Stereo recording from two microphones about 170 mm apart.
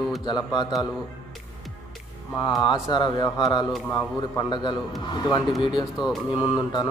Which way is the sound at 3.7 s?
10° left (ahead or behind).